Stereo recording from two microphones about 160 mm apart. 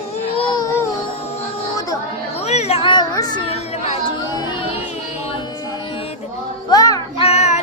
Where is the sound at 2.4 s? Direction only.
40° left (ahead or behind); by 3.4 s 25° left (ahead or behind).